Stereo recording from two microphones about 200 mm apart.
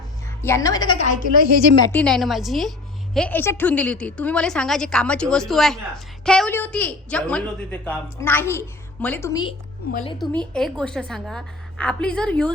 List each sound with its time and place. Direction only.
0.4 s a woman's voice: 15° left (ahead or behind)
0.9 s a woman's voice: 40° left (ahead or behind)
1.8 s a woman's voice: 10° left (ahead or behind)
9.8 s a woman's voice: 50° left (ahead or behind)
10.5 s a woman's voice: 5° left (ahead or behind)